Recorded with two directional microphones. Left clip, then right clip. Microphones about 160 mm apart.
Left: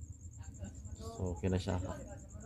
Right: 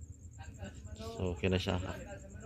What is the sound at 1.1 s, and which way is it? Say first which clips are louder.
Speech: right 4 dB; centre (ahead or behind).